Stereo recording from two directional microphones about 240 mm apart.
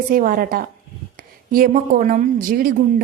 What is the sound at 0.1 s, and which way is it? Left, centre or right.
A woman's voice, right.